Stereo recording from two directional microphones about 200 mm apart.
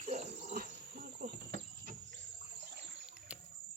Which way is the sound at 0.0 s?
35° right (ahead or behind).